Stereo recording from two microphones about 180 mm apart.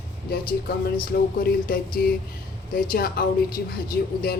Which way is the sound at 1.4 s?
55° left (ahead or behind).